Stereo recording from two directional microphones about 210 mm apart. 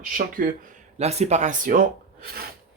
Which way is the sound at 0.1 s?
40° right (ahead or behind).